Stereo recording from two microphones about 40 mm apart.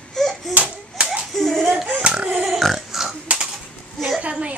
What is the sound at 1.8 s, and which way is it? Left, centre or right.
Dog, right.